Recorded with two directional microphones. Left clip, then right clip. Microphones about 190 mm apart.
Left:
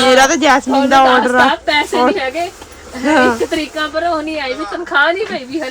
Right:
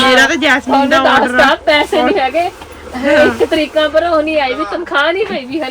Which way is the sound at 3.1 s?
10° left (ahead or behind).